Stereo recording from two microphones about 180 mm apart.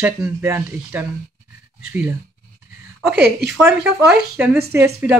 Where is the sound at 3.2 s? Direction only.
65° right (ahead or behind).